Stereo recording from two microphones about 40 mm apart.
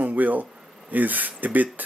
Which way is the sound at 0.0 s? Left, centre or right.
Right.